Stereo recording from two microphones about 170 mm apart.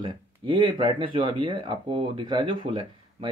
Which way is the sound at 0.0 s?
25° right (ahead or behind).